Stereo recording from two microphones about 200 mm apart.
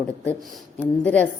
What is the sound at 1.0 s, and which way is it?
Speech, 10° left (ahead or behind).